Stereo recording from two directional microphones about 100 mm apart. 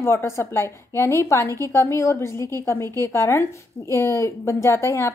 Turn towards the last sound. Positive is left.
turn(degrees=25)  # may be behind; listen again after turning